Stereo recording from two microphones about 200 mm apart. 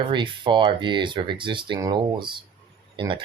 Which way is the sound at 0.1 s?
25° right (ahead or behind).